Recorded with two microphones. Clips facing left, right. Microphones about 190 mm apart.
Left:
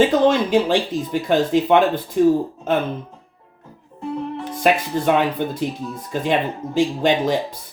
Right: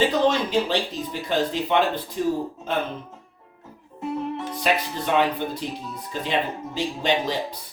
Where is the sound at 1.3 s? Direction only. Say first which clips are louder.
Left 7 dB; 50° left (ahead or behind).